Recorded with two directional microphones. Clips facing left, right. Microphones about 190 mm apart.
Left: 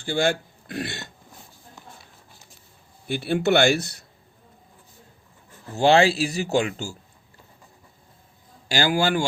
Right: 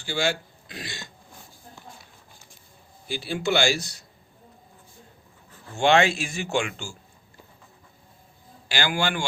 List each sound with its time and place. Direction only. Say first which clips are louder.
0.0 s speech: left 4 dB; 55° left (ahead or behind)
3.1 s speech: left 5 dB; 60° left (ahead or behind)
5.7 s speech: left 3 dB; 35° left (ahead or behind)
8.7 s speech: left 5 dB; 40° left (ahead or behind)